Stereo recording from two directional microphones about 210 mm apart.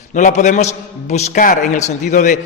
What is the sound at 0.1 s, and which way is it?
A man's voice, 35° left (ahead or behind).